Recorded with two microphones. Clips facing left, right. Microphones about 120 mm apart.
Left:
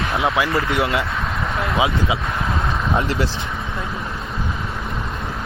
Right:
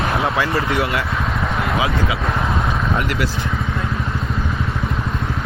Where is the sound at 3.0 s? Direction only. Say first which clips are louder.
Even; 30° left (ahead or behind).